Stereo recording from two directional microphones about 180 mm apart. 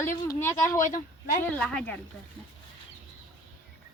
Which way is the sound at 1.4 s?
5° left (ahead or behind).